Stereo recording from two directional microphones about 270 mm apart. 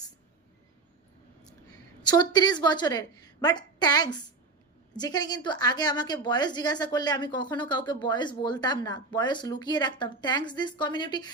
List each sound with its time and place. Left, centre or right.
2.0 s a woman's voice: centre